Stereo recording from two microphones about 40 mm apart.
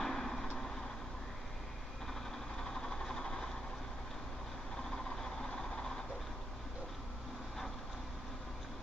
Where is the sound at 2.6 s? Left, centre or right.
Centre.